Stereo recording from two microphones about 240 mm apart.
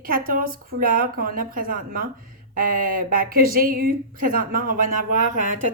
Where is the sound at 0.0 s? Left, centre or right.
Right.